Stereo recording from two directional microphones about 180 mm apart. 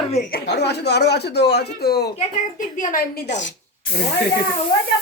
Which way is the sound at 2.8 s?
45° left (ahead or behind).